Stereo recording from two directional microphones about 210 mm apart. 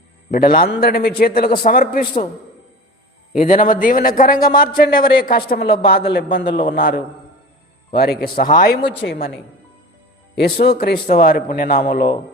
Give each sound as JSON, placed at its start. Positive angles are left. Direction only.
{"t": 0.3, "sound": "a man's voice", "side_deg": 45}
{"t": 3.3, "sound": "a man's voice", "side_deg": 40}